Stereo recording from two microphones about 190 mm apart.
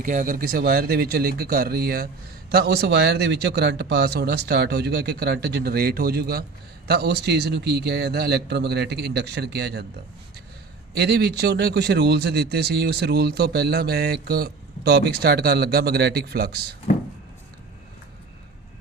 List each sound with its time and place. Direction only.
0.0 s speech: 45° right (ahead or behind); by 9.8 s 60° right (ahead or behind)
10.9 s speech: 60° right (ahead or behind)